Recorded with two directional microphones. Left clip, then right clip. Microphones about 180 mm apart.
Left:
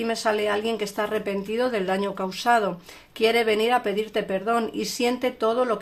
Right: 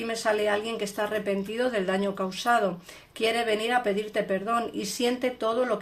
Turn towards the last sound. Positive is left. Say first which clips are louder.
# left 3 dB
turn(degrees=25)  # may be behind; listen again after turning